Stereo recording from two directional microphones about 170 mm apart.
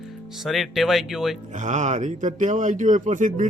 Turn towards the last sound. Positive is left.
turn(degrees=-50)  # may be behind; listen again after turning